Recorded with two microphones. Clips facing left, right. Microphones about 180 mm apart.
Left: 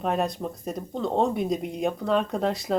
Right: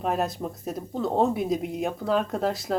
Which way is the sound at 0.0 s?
Centre (ahead or behind).